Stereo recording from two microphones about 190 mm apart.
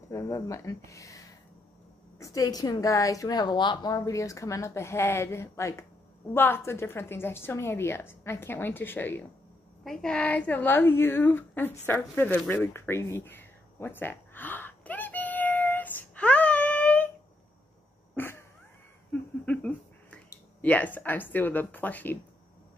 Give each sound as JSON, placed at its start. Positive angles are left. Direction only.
{"t": 0.1, "sound": "a woman's voice", "side_deg": 15}
{"t": 11.8, "sound": "a sound", "side_deg": 10}
{"t": 18.1, "sound": "cat", "side_deg": 10}
{"t": 19.4, "sound": "speech", "side_deg": 5}